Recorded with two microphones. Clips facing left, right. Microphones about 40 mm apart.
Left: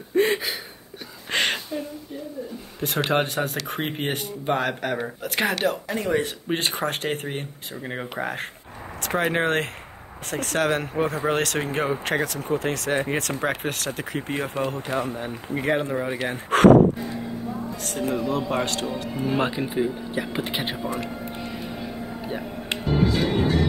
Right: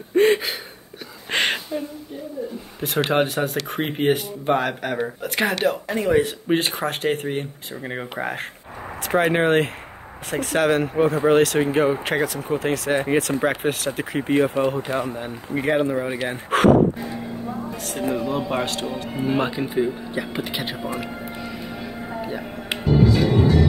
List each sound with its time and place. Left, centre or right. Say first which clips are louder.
0.1 s a sound: right 4 dB; right
1.3 s a sound: right 2 dB; right
3.1 s speech: right 2 dB; centre
15.5 s speech: right 3 dB; centre
17.0 s music: right 1 dB; right
17.8 s speech: right 1 dB; centre
19.4 s speech: right 2 dB; centre
20.4 s speech: even; centre
20.8 s speech: right 1 dB; centre
21.3 s music: right 1 dB; centre
21.7 s vehicle: right 2 dB; right
22.8 s music: right 4 dB; centre